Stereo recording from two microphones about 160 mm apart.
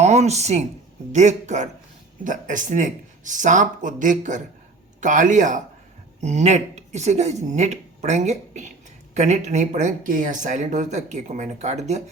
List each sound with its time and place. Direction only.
0.0 s speech: 45° right (ahead or behind)